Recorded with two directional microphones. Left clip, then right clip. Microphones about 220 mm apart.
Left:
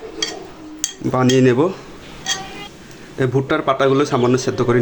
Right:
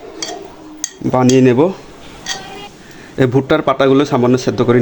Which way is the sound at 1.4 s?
20° right (ahead or behind).